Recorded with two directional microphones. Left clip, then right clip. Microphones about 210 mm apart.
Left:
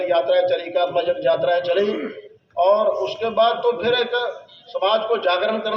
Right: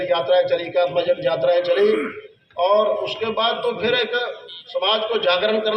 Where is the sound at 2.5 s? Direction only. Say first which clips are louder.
Left 1 dB; 55° left (ahead or behind).